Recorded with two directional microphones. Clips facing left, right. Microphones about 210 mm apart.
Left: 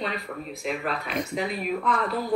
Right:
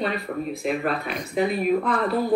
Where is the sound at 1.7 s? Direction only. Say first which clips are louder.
Right 4 dB; 35° right (ahead or behind).